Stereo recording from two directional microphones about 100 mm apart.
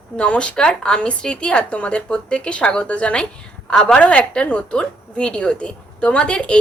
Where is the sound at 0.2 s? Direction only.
10° left (ahead or behind).